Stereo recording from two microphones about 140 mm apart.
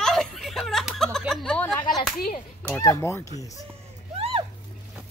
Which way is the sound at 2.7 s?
20° left (ahead or behind).